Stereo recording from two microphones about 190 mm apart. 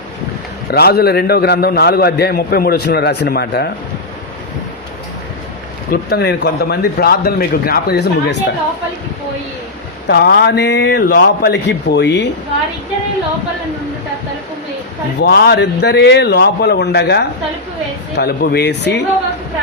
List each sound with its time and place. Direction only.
0.7 s a man's voice: 55° left (ahead or behind)
5.9 s a man's voice: 60° left (ahead or behind)
10.1 s a man's voice: 60° left (ahead or behind)
11.0 s a man's voice: 55° left (ahead or behind)
15.2 s a man's voice: 60° left (ahead or behind)